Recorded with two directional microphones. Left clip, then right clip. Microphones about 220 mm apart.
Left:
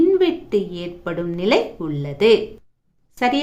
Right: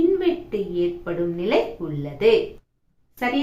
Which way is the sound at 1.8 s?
50° left (ahead or behind).